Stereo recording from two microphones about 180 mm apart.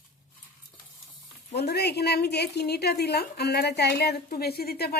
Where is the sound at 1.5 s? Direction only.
65° left (ahead or behind).